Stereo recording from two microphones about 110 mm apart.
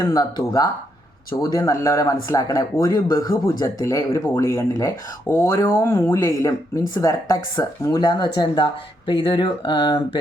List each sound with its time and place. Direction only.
0.0 s speech: 35° left (ahead or behind)